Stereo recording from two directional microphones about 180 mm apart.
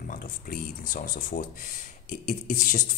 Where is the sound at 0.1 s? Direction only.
50° left (ahead or behind).